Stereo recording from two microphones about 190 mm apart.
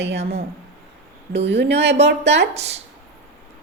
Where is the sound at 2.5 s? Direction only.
35° right (ahead or behind).